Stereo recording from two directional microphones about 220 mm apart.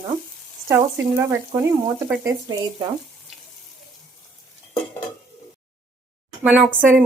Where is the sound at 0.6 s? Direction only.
10° right (ahead or behind).